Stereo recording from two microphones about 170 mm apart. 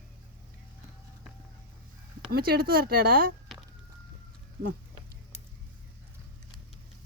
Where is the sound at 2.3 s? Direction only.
65° right (ahead or behind).